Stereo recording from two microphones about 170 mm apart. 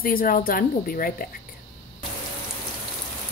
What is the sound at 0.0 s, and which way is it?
Speech, 55° left (ahead or behind).